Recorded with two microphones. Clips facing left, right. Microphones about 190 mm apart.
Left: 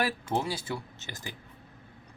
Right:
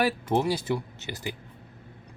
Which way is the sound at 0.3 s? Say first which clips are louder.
Right 6 dB; 15° right (ahead or behind).